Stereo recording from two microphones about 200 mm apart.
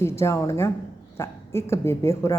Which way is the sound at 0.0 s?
15° left (ahead or behind).